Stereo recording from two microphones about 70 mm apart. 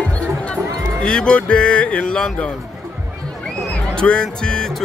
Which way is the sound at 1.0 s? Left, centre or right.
Centre.